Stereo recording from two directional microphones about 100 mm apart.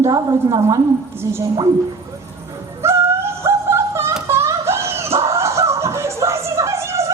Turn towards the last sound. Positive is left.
turn(degrees=-30)  # may be behind; listen again after turning